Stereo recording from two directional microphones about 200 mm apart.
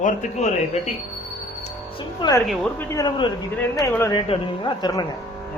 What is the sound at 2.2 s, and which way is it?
Speech, 20° left (ahead or behind).